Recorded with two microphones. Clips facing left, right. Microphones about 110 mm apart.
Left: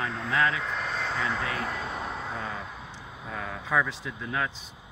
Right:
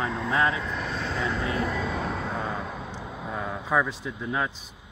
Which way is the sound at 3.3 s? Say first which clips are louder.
Right 2 dB; 15° right (ahead or behind).